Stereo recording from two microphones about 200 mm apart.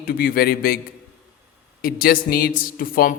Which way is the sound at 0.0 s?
50° left (ahead or behind).